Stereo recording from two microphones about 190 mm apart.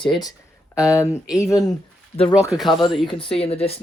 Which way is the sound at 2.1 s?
30° left (ahead or behind).